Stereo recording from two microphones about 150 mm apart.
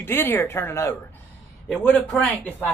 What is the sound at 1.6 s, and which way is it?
Speech, centre (ahead or behind).